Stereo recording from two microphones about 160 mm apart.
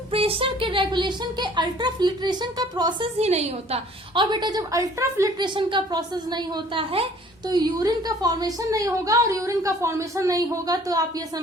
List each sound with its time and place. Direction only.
0.1 s a woman's voice: 35° right (ahead or behind)
3.2 s a woman's voice: 40° right (ahead or behind); by 5.5 s 20° right (ahead or behind)
5.5 s a woman's voice: 30° right (ahead or behind)
7.4 s a woman's voice: 25° right (ahead or behind)